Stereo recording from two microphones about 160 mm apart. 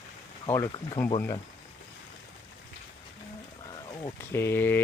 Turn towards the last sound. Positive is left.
turn(degrees=15)  # may be behind; listen again after turning